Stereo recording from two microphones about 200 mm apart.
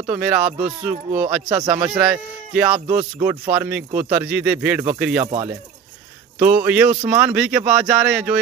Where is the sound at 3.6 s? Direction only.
10° right (ahead or behind).